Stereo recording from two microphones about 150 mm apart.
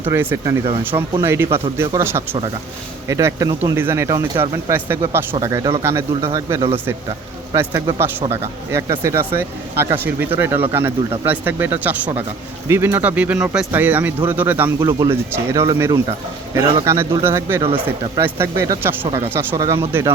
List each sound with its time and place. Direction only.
0.1 s speech: 15° right (ahead or behind)
14.8 s speech: 30° right (ahead or behind)
15.3 s speech: 20° right (ahead or behind)
16.8 s speech: 20° right (ahead or behind)
17.6 s speech: 35° right (ahead or behind)
18.2 s speech: 15° right (ahead or behind)